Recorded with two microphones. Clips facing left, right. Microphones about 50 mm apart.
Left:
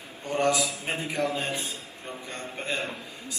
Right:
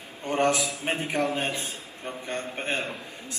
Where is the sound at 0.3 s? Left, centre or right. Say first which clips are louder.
Right 1 dB; right.